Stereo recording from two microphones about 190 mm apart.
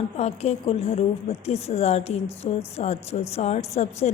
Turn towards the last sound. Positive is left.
turn(degrees=35)  # may be behind; listen again after turning